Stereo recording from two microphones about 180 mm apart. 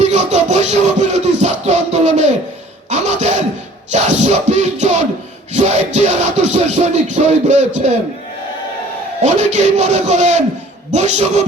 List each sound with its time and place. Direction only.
0.0 s music: 40° right (ahead or behind)
2.9 s a sound: 40° right (ahead or behind)
3.9 s music: 40° right (ahead or behind)
9.2 s music: 40° right (ahead or behind)